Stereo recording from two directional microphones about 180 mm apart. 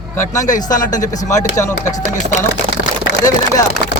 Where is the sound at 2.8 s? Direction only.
65° left (ahead or behind).